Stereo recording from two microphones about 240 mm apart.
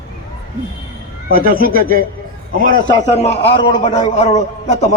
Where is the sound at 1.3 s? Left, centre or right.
Right.